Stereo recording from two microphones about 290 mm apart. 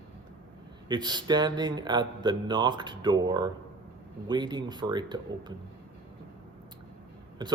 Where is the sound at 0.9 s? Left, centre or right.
Centre.